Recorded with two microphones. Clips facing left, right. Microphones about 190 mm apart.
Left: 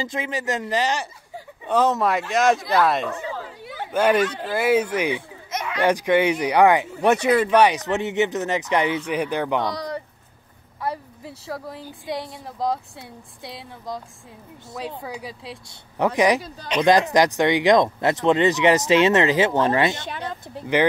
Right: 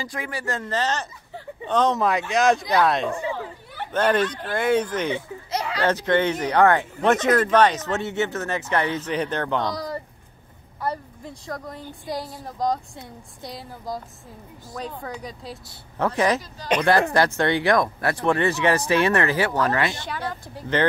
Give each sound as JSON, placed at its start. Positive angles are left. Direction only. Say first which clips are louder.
{"t": 0.0, "sound": "a woman's voice", "louder": "left 4 dB", "side_deg": 20}
{"t": 5.5, "sound": "a sound", "louder": "right 2 dB", "side_deg": -35}
{"t": 5.8, "sound": "a woman's voice", "louder": "left 3 dB", "side_deg": 15}